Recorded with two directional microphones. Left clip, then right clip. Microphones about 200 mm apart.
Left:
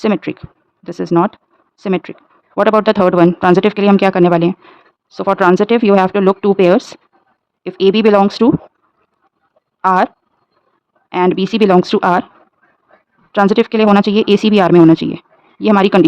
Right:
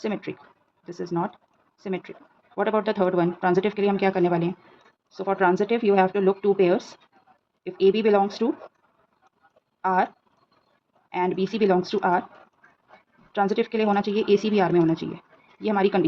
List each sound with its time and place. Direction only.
0.0 s speech: 40° left (ahead or behind)
9.8 s speech: 40° left (ahead or behind)
11.1 s speech: 40° left (ahead or behind)
13.3 s speech: 40° left (ahead or behind)